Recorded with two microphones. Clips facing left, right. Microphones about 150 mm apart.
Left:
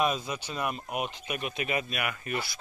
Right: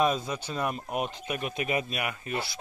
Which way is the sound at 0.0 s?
35° right (ahead or behind).